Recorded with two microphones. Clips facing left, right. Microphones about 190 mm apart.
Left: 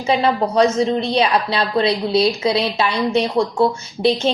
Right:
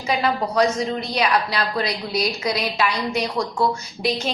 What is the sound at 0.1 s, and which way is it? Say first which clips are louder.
A woman's voice: left 5 dB; 25° left (ahead or behind).